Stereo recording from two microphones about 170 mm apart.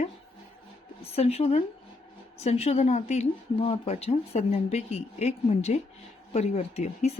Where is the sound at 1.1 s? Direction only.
35° left (ahead or behind).